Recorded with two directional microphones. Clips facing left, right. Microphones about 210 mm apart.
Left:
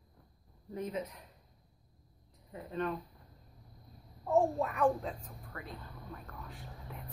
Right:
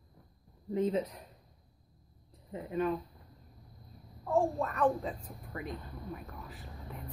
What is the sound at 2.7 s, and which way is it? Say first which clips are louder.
Speech: right 4 dB; 10° right (ahead or behind).